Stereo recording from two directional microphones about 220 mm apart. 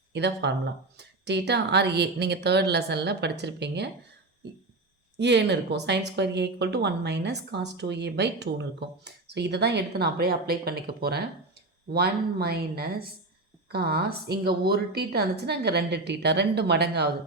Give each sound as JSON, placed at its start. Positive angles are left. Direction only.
{"t": 0.1, "sound": "a woman's voice", "side_deg": -50}
{"t": 5.1, "sound": "a woman's voice", "side_deg": -50}